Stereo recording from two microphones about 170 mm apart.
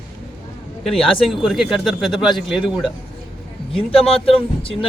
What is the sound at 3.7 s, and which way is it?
Speech, 35° left (ahead or behind).